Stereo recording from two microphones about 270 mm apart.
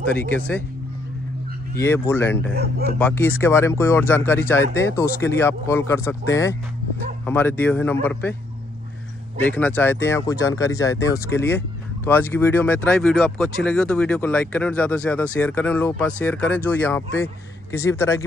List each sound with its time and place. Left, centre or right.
1.8 s speech: centre
2.5 s speech: right
3.0 s speech: centre
9.4 s speech: centre